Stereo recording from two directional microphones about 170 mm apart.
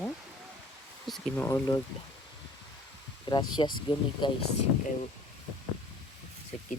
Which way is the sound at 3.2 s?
25° left (ahead or behind).